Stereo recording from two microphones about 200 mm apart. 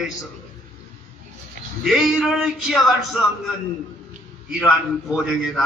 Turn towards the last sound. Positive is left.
turn(degrees=0)  # may be behind; listen again after turning